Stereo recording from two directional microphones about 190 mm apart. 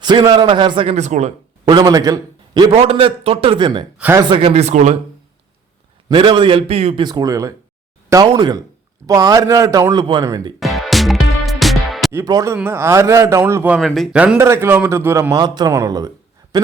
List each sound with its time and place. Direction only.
0.0 s a man's voice: 20° right (ahead or behind)
1.6 s a man's voice: 20° right (ahead or behind)
2.7 s a man's voice: 30° right (ahead or behind)
3.9 s a man's voice: 10° right (ahead or behind)
4.2 s speech: 25° right (ahead or behind)
6.1 s a man's voice: 25° right (ahead or behind)
10.6 s music: centre (ahead or behind)
12.1 s a man's voice: 20° right (ahead or behind)